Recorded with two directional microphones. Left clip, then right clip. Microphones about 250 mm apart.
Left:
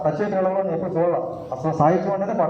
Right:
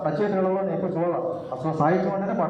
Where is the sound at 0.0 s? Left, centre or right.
Left.